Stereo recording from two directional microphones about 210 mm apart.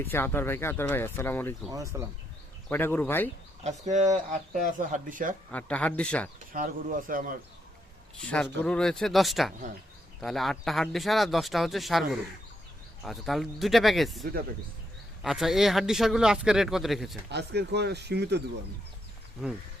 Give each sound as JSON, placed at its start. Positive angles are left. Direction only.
{"t": 0.0, "sound": "speech", "side_deg": 10}
{"t": 1.7, "sound": "speech", "side_deg": -15}
{"t": 2.6, "sound": "speech", "side_deg": 10}
{"t": 3.6, "sound": "speech", "side_deg": -35}
{"t": 5.5, "sound": "speech", "side_deg": 5}
{"t": 6.5, "sound": "speech", "side_deg": -40}
{"t": 8.2, "sound": "speech", "side_deg": 5}
{"t": 17.3, "sound": "speech", "side_deg": -50}